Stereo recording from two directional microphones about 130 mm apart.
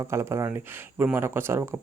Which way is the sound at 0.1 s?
20° right (ahead or behind).